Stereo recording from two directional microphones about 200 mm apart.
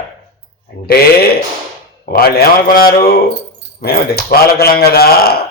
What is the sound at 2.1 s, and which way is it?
A man's voice, 50° left (ahead or behind).